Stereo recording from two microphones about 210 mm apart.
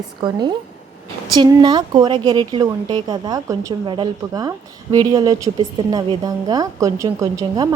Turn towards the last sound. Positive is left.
turn(degrees=-15)  # may be behind; listen again after turning